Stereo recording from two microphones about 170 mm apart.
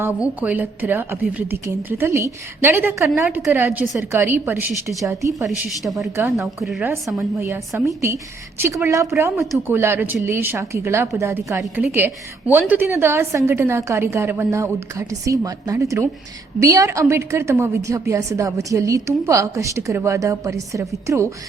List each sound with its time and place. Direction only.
0.0 s a woman's voice: 10° right (ahead or behind)
6.1 s a woman's voice: 15° right (ahead or behind)